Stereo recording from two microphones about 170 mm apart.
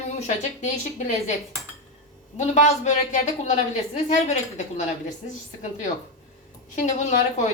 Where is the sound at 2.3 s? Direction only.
45° left (ahead or behind).